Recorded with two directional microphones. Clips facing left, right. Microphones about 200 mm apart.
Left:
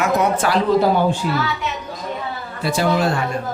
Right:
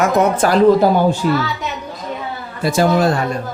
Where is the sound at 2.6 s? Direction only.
45° right (ahead or behind).